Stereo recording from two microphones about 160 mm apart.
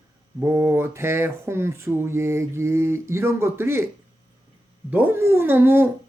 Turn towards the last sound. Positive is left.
turn(degrees=-15)  # may be behind; listen again after turning